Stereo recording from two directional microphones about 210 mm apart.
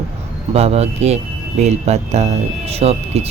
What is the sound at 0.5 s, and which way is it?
Speech, 30° right (ahead or behind).